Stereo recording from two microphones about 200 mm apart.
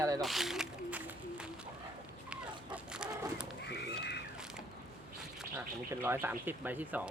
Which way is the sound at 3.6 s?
55° left (ahead or behind).